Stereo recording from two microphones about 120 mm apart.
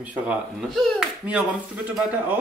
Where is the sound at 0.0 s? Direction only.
10° right (ahead or behind).